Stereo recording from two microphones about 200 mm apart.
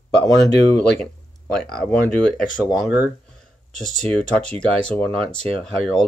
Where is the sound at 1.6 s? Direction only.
5° left (ahead or behind).